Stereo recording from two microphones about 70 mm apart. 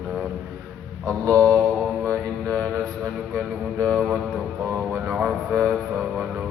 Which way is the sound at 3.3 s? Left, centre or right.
Right.